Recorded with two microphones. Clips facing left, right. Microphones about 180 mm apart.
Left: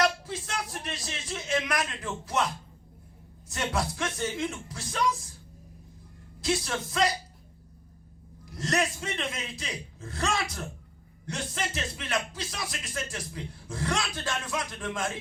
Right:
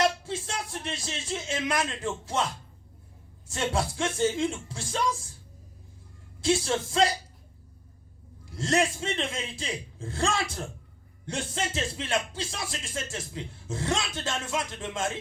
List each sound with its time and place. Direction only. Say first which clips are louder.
0.0 s speech: right 1 dB; 25° right (ahead or behind)
3.5 s speech: right 2 dB; 25° right (ahead or behind)
6.4 s speech: right 4 dB; 25° right (ahead or behind)
8.4 s speech: right 3 dB; 25° right (ahead or behind)